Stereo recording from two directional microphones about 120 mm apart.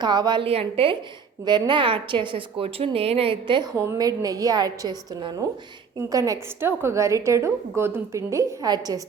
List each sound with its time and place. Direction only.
0.0 s a woman's voice: 35° right (ahead or behind)
0.4 s a woman's voice: 55° right (ahead or behind)
1.5 s a woman's voice: 40° right (ahead or behind)
3.8 s a woman's voice: 25° right (ahead or behind)